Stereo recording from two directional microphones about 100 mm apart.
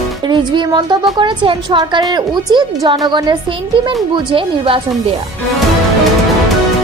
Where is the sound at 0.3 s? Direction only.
50° right (ahead or behind).